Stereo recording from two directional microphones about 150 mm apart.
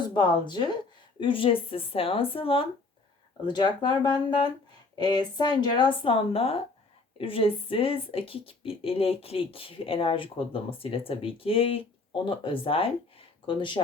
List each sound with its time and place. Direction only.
0.0 s a woman's voice: 30° left (ahead or behind)